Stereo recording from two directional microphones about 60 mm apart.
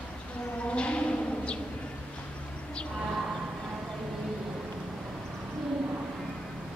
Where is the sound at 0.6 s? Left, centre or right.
Centre.